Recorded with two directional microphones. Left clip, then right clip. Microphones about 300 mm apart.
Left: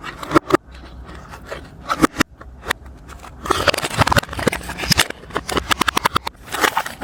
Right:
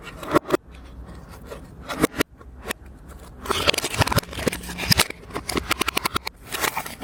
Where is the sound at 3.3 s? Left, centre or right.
Centre.